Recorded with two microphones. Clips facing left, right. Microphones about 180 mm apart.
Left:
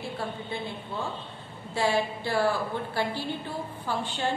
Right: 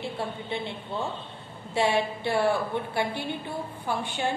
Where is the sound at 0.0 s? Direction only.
25° right (ahead or behind).